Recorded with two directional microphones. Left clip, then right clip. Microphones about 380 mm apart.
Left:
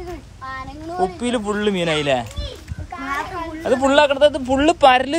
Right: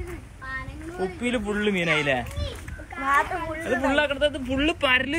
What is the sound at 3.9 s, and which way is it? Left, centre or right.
Speech, centre.